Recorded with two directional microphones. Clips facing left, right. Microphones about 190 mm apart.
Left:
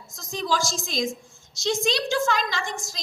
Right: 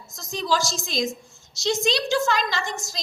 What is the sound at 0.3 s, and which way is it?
A woman's voice, 50° left (ahead or behind).